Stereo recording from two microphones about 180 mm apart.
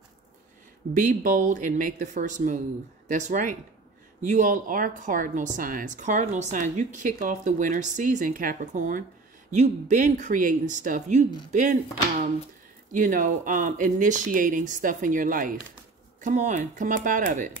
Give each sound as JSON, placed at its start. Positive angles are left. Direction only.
{"t": 0.9, "sound": "speech", "side_deg": -45}